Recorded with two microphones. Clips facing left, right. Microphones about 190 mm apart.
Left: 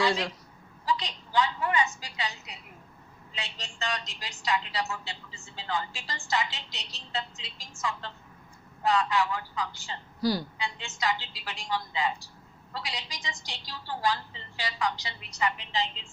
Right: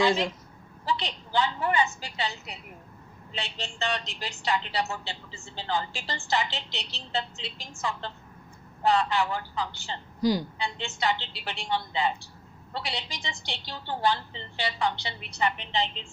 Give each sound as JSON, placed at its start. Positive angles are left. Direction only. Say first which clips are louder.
{"t": 0.0, "sound": "a woman's voice", "louder": "right 3 dB", "side_deg": -20}
{"t": 10.2, "sound": "a woman's voice", "louder": "right 3 dB", "side_deg": -15}
{"t": 10.6, "sound": "a woman's voice", "louder": "right 3 dB", "side_deg": -30}